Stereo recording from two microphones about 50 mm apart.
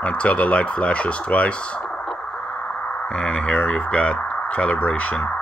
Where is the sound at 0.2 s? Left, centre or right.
Left.